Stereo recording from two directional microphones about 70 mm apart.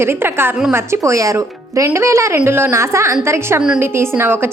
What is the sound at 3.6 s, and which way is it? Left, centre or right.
Speech, centre.